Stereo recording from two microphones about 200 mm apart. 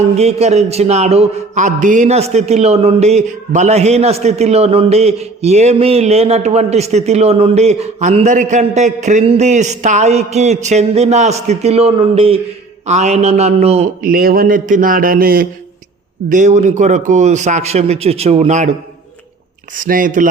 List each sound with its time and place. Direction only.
0.0 s a man's voice: 30° right (ahead or behind)
14.0 s a man's voice: 45° right (ahead or behind)
16.3 s a man's voice: 35° right (ahead or behind)
19.7 s a man's voice: 40° right (ahead or behind)